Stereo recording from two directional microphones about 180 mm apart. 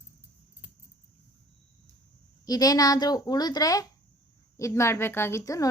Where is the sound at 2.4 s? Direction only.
20° left (ahead or behind).